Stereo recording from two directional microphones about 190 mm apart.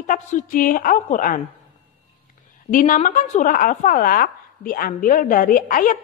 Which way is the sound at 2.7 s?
45° left (ahead or behind).